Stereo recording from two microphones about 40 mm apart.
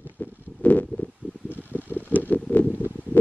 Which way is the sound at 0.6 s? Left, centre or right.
Left.